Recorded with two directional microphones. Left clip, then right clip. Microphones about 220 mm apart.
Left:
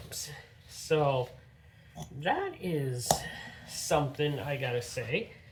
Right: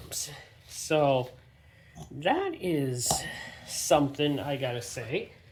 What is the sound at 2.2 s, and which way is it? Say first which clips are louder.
Speech: right 4 dB; 40° right (ahead or behind).